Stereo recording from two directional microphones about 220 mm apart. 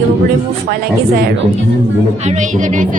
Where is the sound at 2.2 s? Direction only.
35° right (ahead or behind).